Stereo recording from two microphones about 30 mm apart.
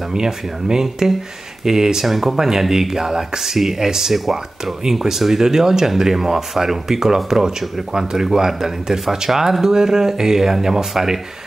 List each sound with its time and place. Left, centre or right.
0.1 s speech: right
2.0 s speech: centre
2.3 s speech: centre